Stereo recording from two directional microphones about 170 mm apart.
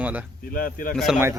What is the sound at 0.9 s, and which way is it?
Speech, centre (ahead or behind).